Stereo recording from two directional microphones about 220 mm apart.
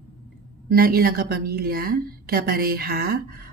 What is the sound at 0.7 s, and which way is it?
A woman's voice, 45° right (ahead or behind).